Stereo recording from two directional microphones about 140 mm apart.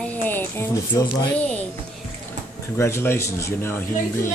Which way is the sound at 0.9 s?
25° left (ahead or behind).